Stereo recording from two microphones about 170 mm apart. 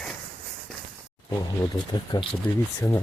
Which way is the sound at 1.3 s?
25° left (ahead or behind).